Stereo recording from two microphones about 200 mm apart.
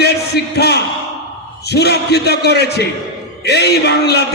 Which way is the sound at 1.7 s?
55° left (ahead or behind).